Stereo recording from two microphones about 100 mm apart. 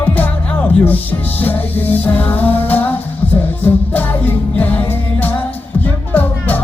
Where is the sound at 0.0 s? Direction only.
15° left (ahead or behind).